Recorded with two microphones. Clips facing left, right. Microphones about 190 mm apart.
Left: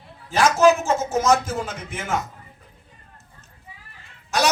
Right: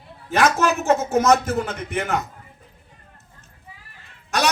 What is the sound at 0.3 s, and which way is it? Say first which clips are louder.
A man's voice: left 3 dB; 60° right (ahead or behind).